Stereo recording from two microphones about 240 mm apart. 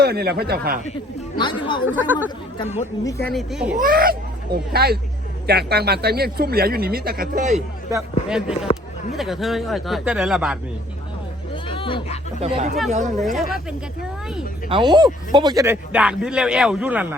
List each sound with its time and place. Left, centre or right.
0.0 s speech: right
1.4 s speech: centre
2.0 s speech: centre
2.6 s speech: left
3.3 s speech: centre
3.8 s speech: right
7.9 s speech: centre
11.5 s speech: left
12.4 s speech: right
13.1 s speech: centre
14.7 s speech: centre